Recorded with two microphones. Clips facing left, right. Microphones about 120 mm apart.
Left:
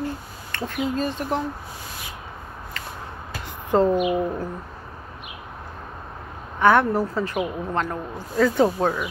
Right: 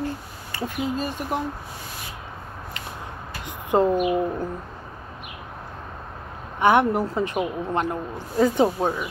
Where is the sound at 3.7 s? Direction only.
15° right (ahead or behind).